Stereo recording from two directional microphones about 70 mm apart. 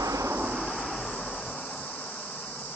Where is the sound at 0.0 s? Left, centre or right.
Right.